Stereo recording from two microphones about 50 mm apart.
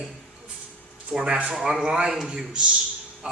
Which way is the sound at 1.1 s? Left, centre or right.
Right.